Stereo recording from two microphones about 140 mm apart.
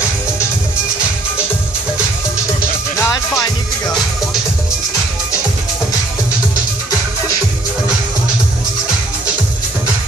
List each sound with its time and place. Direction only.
3.0 s music: 20° left (ahead or behind)